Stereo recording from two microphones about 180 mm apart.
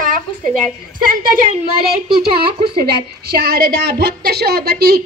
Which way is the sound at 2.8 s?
60° right (ahead or behind).